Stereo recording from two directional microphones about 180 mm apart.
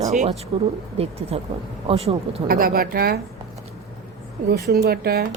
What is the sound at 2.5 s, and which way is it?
Speech, 55° right (ahead or behind).